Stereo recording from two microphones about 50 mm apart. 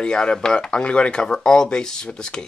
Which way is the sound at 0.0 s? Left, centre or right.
Centre.